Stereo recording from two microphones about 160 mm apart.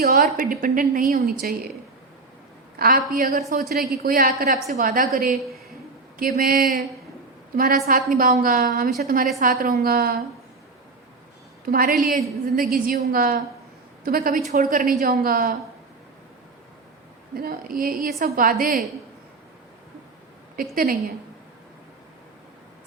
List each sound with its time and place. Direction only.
0.0 s a woman's voice: 65° right (ahead or behind)
2.7 s a woman's voice: 70° right (ahead or behind)
11.6 s a woman's voice: 65° right (ahead or behind)
12.0 s a woman's voice: 55° right (ahead or behind)
14.4 s a woman's voice: 50° right (ahead or behind)
17.3 s a woman's voice: 65° right (ahead or behind)